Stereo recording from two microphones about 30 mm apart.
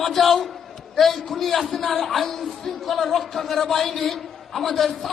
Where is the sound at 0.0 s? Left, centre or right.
Centre.